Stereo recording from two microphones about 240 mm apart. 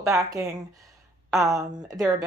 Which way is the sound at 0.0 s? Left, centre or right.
Centre.